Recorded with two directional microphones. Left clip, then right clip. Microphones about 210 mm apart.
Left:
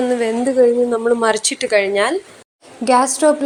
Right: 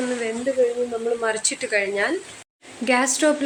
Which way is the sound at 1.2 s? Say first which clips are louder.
Left 7 dB; 30° left (ahead or behind).